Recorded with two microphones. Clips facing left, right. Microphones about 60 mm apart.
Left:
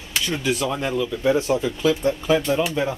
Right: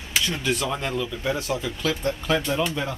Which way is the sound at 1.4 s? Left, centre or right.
Left.